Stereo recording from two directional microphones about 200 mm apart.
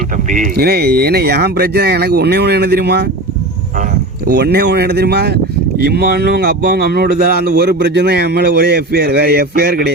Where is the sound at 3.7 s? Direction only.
45° right (ahead or behind).